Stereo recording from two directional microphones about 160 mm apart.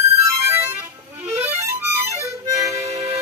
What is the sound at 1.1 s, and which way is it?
Harmonica, 15° right (ahead or behind).